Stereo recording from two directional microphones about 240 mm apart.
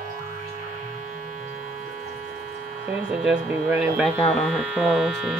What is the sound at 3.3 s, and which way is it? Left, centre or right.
Speech, centre.